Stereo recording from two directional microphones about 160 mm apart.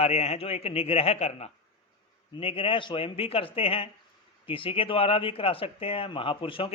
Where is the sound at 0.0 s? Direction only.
40° left (ahead or behind).